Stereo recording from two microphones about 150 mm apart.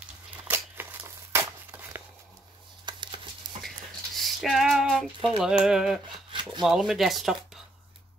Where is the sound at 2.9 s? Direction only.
30° right (ahead or behind).